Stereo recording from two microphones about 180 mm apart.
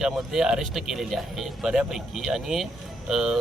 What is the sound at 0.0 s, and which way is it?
Speech, centre (ahead or behind).